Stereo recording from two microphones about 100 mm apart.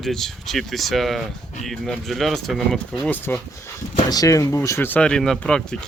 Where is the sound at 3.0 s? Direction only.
15° left (ahead or behind).